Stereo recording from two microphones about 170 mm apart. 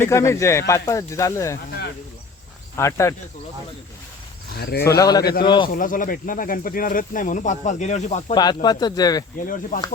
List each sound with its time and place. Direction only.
0.0 s speech: 15° left (ahead or behind)
2.7 s speech: 15° left (ahead or behind)
4.5 s speech: 70° left (ahead or behind)
4.9 s speech: 20° left (ahead or behind)
5.7 s speech: 50° left (ahead or behind)
8.4 s speech: 25° left (ahead or behind)
9.5 s speech: 55° left (ahead or behind)